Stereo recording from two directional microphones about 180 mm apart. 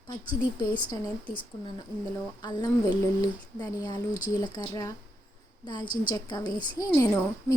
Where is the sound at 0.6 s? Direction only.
20° left (ahead or behind).